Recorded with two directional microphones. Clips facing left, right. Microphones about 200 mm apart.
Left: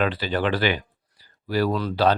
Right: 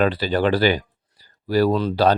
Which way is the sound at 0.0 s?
35° right (ahead or behind).